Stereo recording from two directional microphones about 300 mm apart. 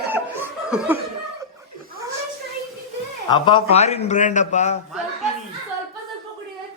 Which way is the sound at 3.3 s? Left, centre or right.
Centre.